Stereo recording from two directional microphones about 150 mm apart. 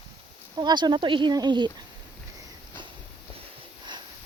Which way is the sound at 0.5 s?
30° right (ahead or behind).